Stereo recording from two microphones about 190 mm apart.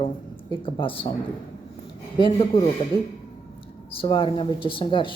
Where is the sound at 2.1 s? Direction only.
25° left (ahead or behind).